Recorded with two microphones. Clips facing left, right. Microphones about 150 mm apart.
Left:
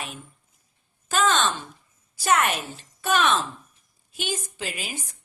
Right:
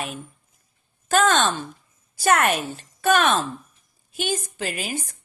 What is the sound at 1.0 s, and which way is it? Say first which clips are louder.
A woman's voice: right 4 dB; 50° right (ahead or behind).